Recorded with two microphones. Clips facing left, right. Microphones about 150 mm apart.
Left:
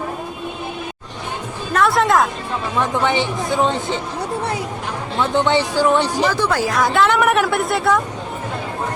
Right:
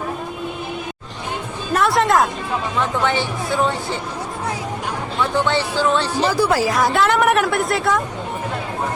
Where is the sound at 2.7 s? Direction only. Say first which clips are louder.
Left 2 dB; 15° left (ahead or behind).